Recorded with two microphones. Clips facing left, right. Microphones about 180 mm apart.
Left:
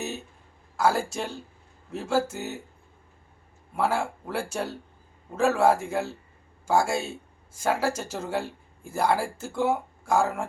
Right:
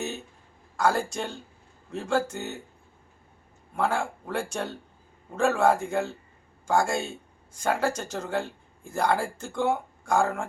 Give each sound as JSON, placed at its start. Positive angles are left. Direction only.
{"t": 0.8, "sound": "speech", "side_deg": 5}
{"t": 3.8, "sound": "speech", "side_deg": 5}